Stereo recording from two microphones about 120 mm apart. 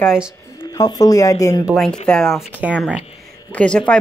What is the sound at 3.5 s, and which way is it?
Speech, 10° left (ahead or behind).